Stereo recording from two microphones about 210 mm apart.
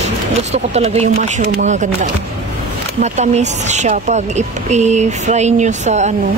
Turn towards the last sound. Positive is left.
turn(degrees=-35)  # may be behind; listen again after turning